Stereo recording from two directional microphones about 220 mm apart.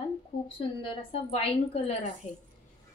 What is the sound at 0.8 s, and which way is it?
A woman's voice, 25° left (ahead or behind).